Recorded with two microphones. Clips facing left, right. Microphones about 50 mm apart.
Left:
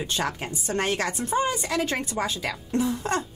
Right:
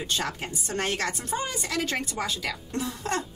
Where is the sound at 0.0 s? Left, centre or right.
Left.